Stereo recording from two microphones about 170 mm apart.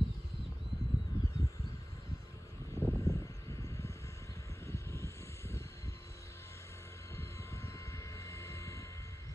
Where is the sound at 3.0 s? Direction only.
20° left (ahead or behind).